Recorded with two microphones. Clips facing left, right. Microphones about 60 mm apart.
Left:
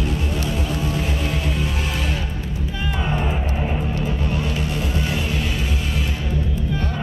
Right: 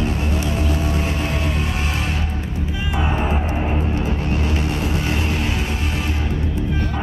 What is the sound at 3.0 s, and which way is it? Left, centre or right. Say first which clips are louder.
Music: right 3 dB; right.